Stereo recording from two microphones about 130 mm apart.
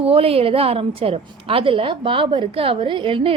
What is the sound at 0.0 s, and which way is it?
A woman's voice, 50° right (ahead or behind).